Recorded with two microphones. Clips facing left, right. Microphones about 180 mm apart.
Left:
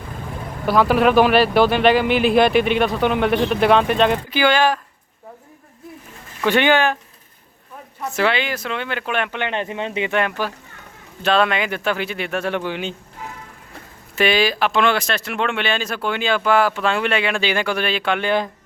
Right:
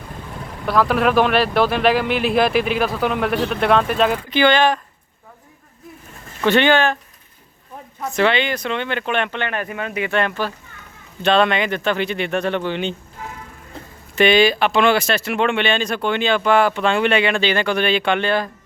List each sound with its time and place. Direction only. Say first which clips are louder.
0.6 s speech: left 2 dB; centre (ahead or behind)
6.4 s speech: right 1 dB; 10° left (ahead or behind)
8.1 s speech: right 2 dB; 5° left (ahead or behind)
9.5 s speech: left 1 dB; 25° left (ahead or behind)
10.2 s speech: right 2 dB; 10° left (ahead or behind)
14.2 s speech: right 3 dB; centre (ahead or behind)
18.3 s speech: even; 15° left (ahead or behind)